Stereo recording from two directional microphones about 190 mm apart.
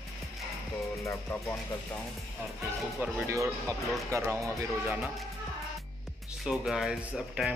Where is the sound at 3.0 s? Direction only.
10° right (ahead or behind).